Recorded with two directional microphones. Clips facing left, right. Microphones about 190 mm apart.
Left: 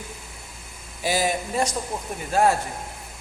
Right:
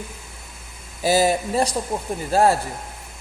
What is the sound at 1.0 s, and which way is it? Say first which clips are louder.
Speech: right 6 dB; 40° right (ahead or behind).